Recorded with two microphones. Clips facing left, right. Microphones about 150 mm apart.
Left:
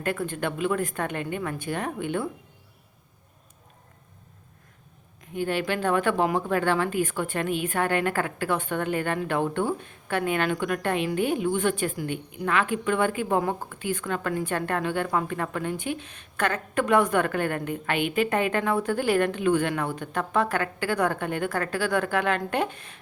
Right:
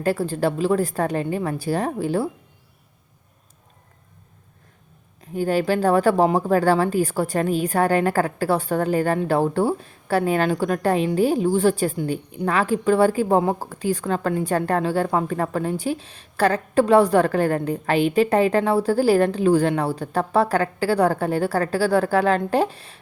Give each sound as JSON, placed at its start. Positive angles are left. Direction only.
{"t": 0.0, "sound": "speech", "side_deg": -35}
{"t": 5.3, "sound": "speech", "side_deg": -40}